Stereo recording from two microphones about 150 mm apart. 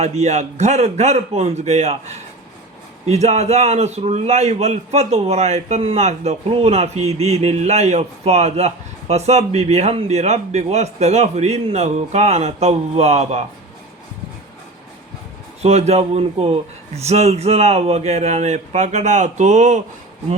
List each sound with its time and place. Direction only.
0.0 s a man's voice: 50° right (ahead or behind)
15.6 s a man's voice: 45° right (ahead or behind)